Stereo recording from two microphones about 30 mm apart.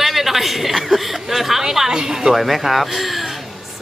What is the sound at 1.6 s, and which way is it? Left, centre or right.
Speech, centre.